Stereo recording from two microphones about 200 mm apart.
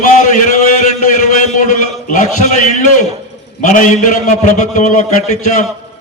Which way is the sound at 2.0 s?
35° left (ahead or behind).